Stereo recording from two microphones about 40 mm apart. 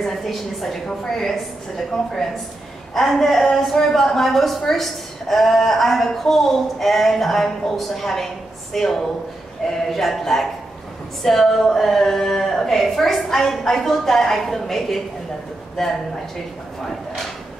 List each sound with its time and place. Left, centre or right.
0.0 s speech: centre
2.9 s a woman's voice: centre